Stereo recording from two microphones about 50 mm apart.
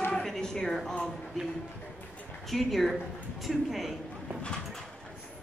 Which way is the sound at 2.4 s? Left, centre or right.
Centre.